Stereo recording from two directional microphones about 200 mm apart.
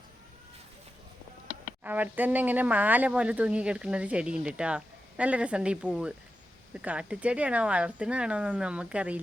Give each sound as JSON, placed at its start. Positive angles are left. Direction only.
{"t": 1.8, "sound": "speech", "side_deg": -10}